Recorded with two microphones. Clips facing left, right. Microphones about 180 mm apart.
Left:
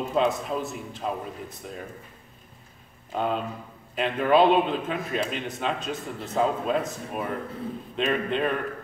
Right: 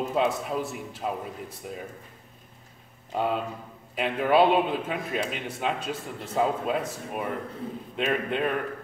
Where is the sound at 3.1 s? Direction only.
10° right (ahead or behind).